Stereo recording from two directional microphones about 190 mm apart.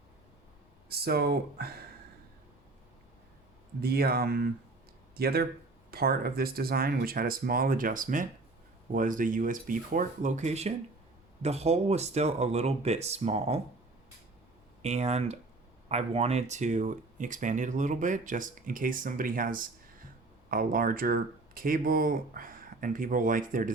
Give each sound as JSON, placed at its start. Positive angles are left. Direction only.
{"t": 0.9, "sound": "speech", "side_deg": -55}
{"t": 3.8, "sound": "speech", "side_deg": -55}
{"t": 14.8, "sound": "speech", "side_deg": -35}